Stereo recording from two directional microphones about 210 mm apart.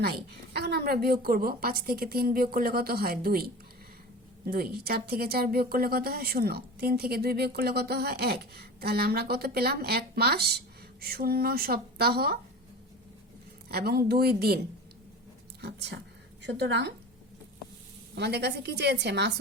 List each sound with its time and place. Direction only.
0.5 s speech: 50° right (ahead or behind)
13.7 s a woman's voice: 45° right (ahead or behind)
18.1 s speech: 50° right (ahead or behind)